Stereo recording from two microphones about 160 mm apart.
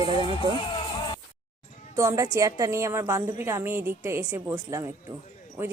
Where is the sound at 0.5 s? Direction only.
30° left (ahead or behind).